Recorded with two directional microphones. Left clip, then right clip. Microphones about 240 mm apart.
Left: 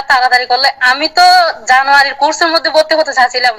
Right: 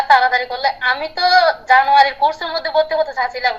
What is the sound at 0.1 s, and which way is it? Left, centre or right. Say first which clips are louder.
A woman's voice: left 5 dB; left.